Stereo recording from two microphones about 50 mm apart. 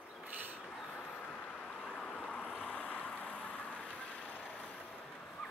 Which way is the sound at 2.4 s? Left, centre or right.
Centre.